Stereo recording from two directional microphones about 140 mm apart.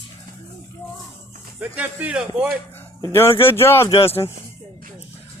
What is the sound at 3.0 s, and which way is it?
Speech, 20° left (ahead or behind).